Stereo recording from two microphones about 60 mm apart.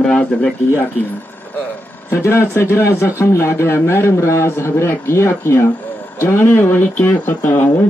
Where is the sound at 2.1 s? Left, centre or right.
Left.